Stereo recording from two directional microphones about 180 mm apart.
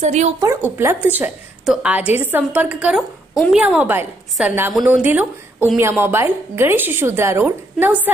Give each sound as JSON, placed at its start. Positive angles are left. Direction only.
{"t": 0.0, "sound": "speech", "side_deg": -40}
{"t": 0.4, "sound": "a woman's voice", "side_deg": -15}